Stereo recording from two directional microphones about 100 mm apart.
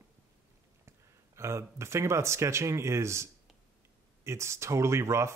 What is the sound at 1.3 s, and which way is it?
Speech, 30° right (ahead or behind).